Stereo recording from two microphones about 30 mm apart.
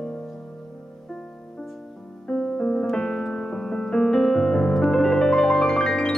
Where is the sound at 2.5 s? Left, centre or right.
Left.